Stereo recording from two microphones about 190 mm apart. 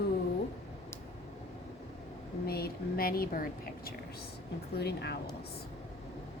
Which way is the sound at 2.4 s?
55° left (ahead or behind).